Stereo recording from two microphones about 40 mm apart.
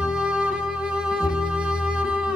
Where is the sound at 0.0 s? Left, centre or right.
Right.